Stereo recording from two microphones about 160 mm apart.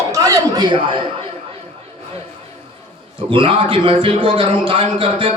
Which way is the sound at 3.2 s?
35° right (ahead or behind).